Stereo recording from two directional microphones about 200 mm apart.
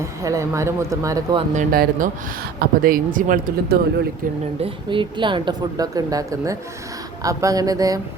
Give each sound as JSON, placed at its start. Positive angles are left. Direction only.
{"t": 0.0, "sound": "speech", "side_deg": -15}
{"t": 1.5, "sound": "speech", "side_deg": -45}
{"t": 4.6, "sound": "speech", "side_deg": -25}